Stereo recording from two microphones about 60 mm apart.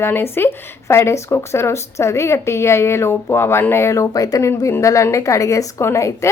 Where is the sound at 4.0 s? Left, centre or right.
Left.